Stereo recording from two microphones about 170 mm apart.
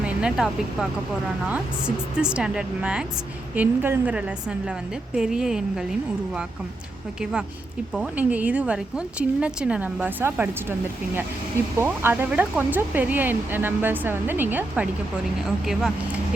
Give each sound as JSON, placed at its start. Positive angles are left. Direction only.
{"t": 0.0, "sound": "speech", "side_deg": -5}
{"t": 2.1, "sound": "a woman's voice", "side_deg": -5}
{"t": 7.9, "sound": "a woman's voice", "side_deg": -5}